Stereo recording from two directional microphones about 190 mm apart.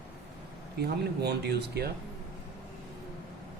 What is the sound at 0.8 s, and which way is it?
Speech, 60° right (ahead or behind).